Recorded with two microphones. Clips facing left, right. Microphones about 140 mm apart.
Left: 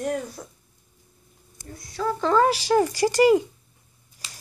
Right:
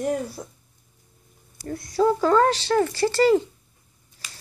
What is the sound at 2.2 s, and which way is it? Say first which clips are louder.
Speech: right 1 dB; 5° left (ahead or behind).